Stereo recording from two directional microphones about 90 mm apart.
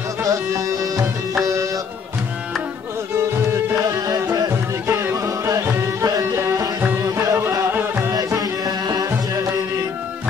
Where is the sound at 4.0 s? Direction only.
45° right (ahead or behind).